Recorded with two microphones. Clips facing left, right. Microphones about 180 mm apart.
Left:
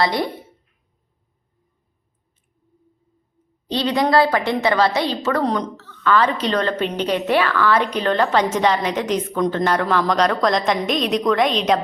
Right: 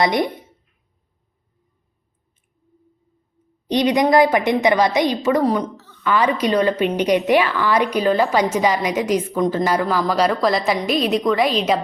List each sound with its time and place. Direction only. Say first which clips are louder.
0.0 s a woman's voice: right 2 dB; 20° right (ahead or behind)
3.7 s a woman's voice: right 3 dB; 15° right (ahead or behind)